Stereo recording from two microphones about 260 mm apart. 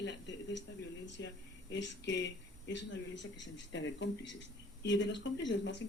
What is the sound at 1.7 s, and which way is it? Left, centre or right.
Speech, left.